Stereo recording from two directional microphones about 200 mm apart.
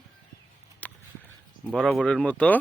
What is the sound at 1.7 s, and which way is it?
Speech, centre (ahead or behind).